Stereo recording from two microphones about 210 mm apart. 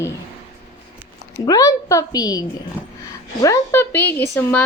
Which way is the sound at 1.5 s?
15° left (ahead or behind).